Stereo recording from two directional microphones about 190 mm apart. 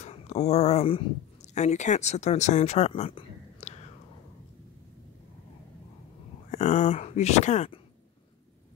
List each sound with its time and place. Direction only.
0.0 s speech: 35° left (ahead or behind)
6.5 s speech: 35° left (ahead or behind)